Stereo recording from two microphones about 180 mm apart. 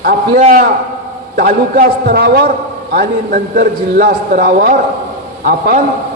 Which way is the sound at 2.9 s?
50° right (ahead or behind).